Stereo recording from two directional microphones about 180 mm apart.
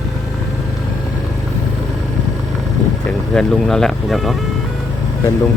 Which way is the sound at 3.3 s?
5° left (ahead or behind).